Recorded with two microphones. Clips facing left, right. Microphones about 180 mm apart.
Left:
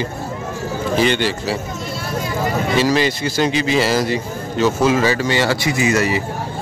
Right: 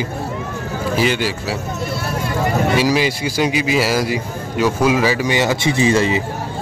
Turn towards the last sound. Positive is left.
turn(degrees=-25)  # may be behind; listen again after turning